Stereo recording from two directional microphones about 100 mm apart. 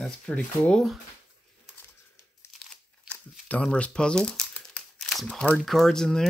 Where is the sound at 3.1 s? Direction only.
10° left (ahead or behind).